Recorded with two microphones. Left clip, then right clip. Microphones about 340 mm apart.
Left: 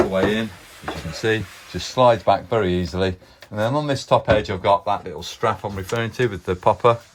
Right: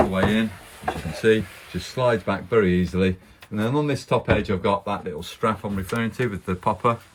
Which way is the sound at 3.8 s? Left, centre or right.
Centre.